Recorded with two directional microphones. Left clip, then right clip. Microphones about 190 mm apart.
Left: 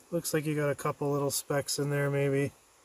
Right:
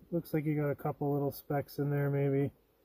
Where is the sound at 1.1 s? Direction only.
25° left (ahead or behind).